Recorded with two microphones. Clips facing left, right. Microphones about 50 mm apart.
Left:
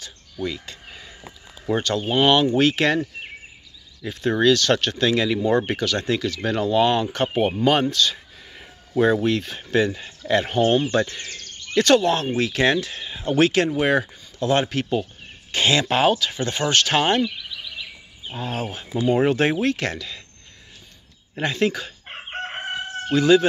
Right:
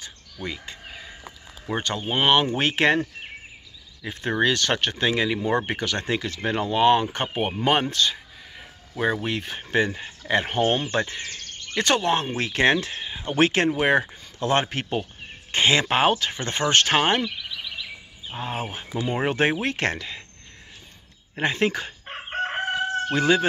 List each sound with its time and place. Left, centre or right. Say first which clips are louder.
0.0 s bird: left 5 dB; right
1.7 s speech: left 4 dB; right
9.0 s speech: left 5 dB; centre
13.0 s a sound: left 2 dB; centre
13.3 s speech: left 2 dB; right
18.3 s speech: left 2 dB; right
21.4 s speech: left 1 dB; right
22.3 s chicken: right 4 dB; centre
23.1 s speech: left 5 dB; right